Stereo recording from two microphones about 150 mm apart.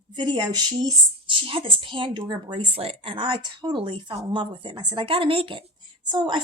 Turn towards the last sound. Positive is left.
turn(degrees=-30)  # may be behind; listen again after turning